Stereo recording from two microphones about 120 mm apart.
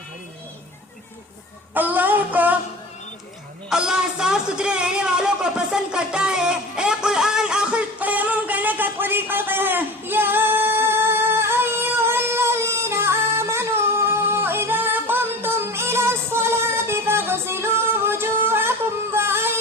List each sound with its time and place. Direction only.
1.7 s music: 15° right (ahead or behind)
3.7 s a sound: 5° right (ahead or behind)
19.1 s music: 20° right (ahead or behind)